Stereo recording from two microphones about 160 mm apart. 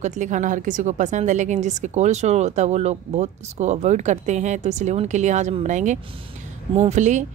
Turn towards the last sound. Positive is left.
turn(degrees=-45)  # may be behind; listen again after turning